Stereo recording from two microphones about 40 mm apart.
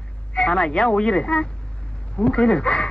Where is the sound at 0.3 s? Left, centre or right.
Left.